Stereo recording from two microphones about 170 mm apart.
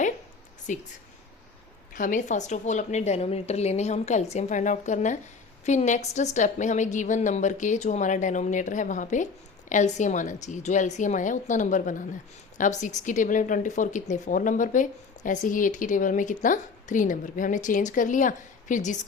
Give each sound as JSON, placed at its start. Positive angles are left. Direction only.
{"t": 0.7, "sound": "a woman's voice", "side_deg": 45}
{"t": 1.9, "sound": "a woman's voice", "side_deg": 50}